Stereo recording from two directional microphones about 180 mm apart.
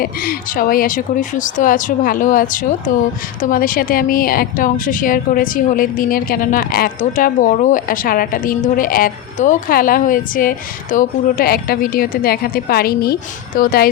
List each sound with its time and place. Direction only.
0.0 s a woman's voice: 55° left (ahead or behind)